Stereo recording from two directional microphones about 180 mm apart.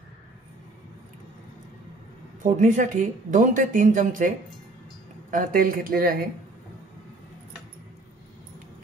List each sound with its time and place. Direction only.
2.4 s speech: 45° right (ahead or behind)
5.3 s speech: 50° right (ahead or behind)